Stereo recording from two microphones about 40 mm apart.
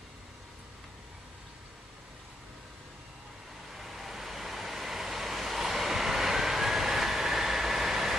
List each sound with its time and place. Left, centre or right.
3.7 s waves: centre